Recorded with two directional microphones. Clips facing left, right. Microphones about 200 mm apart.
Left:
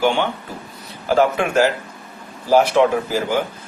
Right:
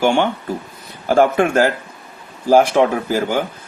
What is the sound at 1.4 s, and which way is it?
Speech, 50° right (ahead or behind).